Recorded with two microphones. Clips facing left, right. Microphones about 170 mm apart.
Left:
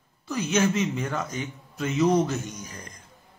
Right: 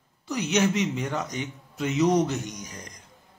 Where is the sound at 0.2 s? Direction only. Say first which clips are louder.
Even; 15° right (ahead or behind).